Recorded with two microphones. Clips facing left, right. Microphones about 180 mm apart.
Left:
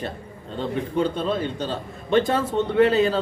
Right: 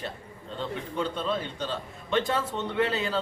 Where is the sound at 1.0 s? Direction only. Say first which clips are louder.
Left 5 dB; 40° left (ahead or behind).